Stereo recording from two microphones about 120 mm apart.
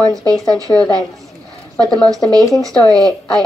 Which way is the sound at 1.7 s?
5° left (ahead or behind).